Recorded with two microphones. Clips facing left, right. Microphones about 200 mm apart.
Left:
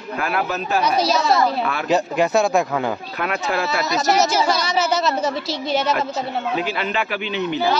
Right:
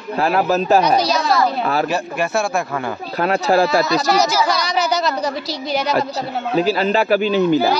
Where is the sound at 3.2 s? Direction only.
35° right (ahead or behind).